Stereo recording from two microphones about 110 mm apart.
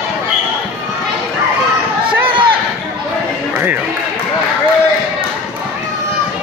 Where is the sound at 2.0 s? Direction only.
50° right (ahead or behind).